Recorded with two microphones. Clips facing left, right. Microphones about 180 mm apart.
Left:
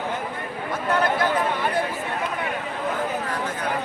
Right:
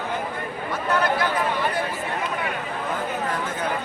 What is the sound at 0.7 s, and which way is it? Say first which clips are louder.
Speech: even; 50° left (ahead or behind).